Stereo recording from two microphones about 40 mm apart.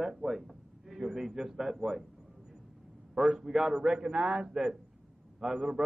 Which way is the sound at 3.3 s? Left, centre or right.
Centre.